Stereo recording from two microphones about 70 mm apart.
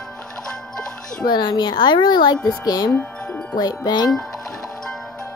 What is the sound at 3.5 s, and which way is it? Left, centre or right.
Wind chime, left.